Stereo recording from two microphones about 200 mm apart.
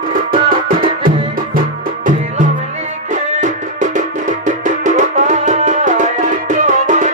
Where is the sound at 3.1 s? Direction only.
40° right (ahead or behind).